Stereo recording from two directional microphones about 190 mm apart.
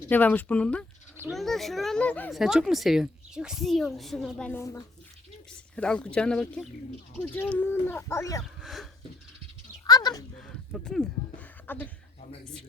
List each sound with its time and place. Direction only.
0.1 s a child's voice: 10° left (ahead or behind)
2.4 s a child's voice: 5° right (ahead or behind); by 8.4 s 15° left (ahead or behind)
8.6 s a sound: centre (ahead or behind)
9.8 s speech: 20° left (ahead or behind)
10.3 s speech: 5° left (ahead or behind)